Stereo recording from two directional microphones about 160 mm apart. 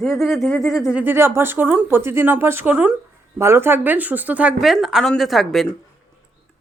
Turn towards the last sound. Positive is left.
turn(degrees=0)  # may be behind; listen again after turning